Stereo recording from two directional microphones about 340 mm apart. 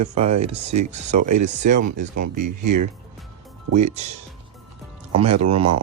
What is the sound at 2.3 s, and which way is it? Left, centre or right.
Speech, right.